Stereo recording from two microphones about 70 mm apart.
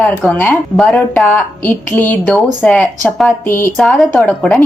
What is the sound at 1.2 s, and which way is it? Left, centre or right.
A woman's voice, left.